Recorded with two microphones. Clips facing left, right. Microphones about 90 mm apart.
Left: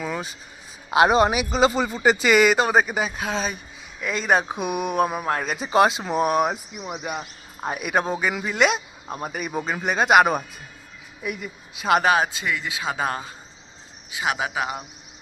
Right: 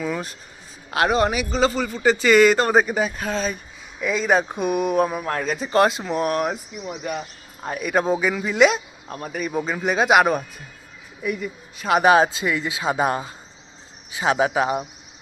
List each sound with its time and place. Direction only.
0.0 s speech: 5° left (ahead or behind)
0.9 s a man's voice: 20° left (ahead or behind)
12.0 s speech: 25° right (ahead or behind)